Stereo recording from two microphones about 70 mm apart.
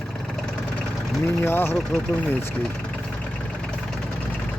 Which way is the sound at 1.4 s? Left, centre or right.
Left.